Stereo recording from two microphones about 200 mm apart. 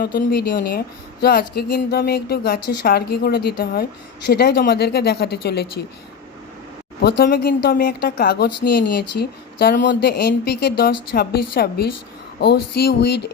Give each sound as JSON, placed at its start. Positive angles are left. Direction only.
{"t": 0.0, "sound": "a woman's voice", "side_deg": 50}
{"t": 7.0, "sound": "a woman's voice", "side_deg": 55}
{"t": 12.4, "sound": "a sound", "side_deg": 55}